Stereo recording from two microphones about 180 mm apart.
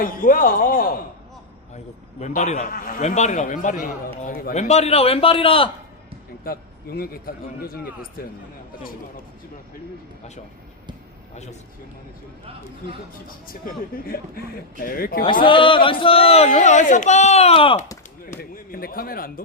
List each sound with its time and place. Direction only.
0.0 s speech: 50° left (ahead or behind)
1.7 s a man's voice: 40° left (ahead or behind)
6.4 s a man's voice: 55° left (ahead or behind)
14.1 s speech: 55° left (ahead or behind)
15.3 s a man's voice: 25° left (ahead or behind)
18.3 s speech: 55° left (ahead or behind)